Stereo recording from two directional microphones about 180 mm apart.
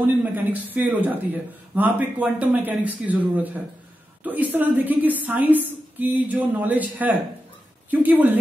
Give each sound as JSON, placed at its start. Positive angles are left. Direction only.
{"t": 0.0, "sound": "speech", "side_deg": -10}